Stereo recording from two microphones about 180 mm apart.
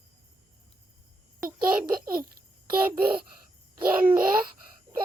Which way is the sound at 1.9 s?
55° right (ahead or behind).